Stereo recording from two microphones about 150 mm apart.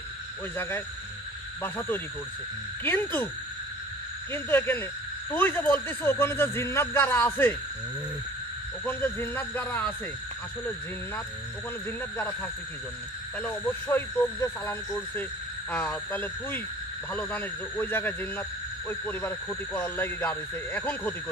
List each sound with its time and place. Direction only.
0.6 s a man's voice: 15° left (ahead or behind)
4.3 s a man's voice: 15° left (ahead or behind)
8.8 s a man's voice: 15° left (ahead or behind)
13.4 s a man's voice: 10° left (ahead or behind)